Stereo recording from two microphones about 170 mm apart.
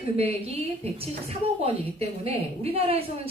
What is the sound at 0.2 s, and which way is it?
A woman's voice, 35° right (ahead or behind).